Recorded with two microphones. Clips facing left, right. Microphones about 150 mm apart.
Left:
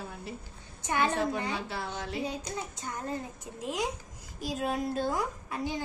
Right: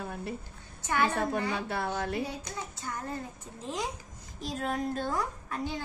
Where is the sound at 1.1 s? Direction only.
50° right (ahead or behind).